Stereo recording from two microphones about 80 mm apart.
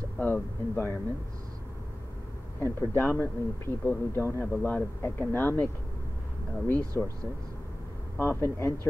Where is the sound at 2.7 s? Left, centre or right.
Left.